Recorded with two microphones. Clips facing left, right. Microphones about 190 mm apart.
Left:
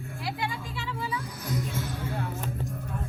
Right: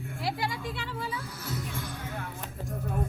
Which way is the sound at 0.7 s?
55° right (ahead or behind).